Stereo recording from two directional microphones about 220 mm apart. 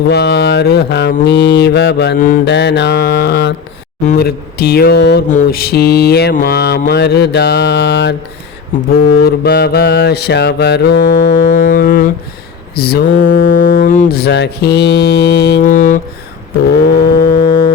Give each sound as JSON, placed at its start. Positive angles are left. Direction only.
{"t": 0.1, "sound": "mantra", "side_deg": 50}
{"t": 9.2, "sound": "mantra", "side_deg": 45}
{"t": 15.6, "sound": "music", "side_deg": 35}
{"t": 17.2, "sound": "music", "side_deg": 50}